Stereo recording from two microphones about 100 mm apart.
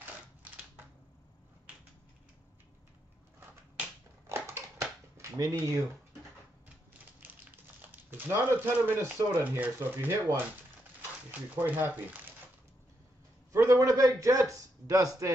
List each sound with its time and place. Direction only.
4.3 s a sound: 25° right (ahead or behind)
5.6 s speech: 30° right (ahead or behind)
7.9 s speech: 20° right (ahead or behind)
13.5 s a man's voice: 30° right (ahead or behind)